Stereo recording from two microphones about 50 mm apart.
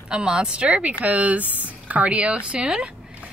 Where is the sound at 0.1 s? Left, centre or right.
Centre.